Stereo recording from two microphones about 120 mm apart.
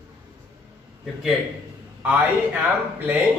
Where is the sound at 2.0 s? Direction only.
15° right (ahead or behind).